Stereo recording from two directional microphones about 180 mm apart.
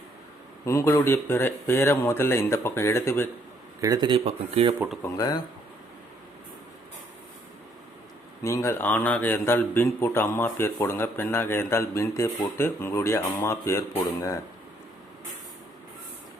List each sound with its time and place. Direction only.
0.6 s a man's voice: 15° left (ahead or behind)
3.8 s speech: 20° right (ahead or behind)
5.0 s speech: 20° left (ahead or behind)
8.4 s a man's voice: 15° left (ahead or behind)